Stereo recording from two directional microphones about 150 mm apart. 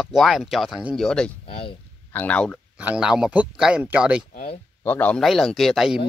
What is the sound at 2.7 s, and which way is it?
Speech, 5° right (ahead or behind).